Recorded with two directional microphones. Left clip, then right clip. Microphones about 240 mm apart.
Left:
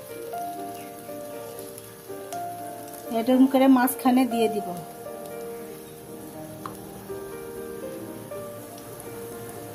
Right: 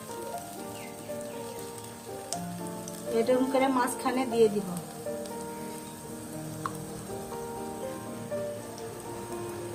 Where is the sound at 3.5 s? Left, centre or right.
Left.